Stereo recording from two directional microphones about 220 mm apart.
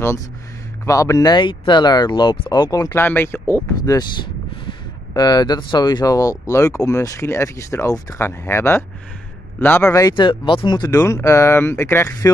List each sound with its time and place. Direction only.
0.8 s speech: 15° left (ahead or behind)